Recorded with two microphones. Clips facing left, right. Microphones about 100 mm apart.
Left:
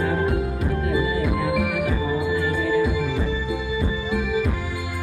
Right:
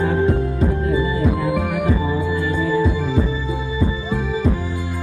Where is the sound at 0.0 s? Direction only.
30° right (ahead or behind).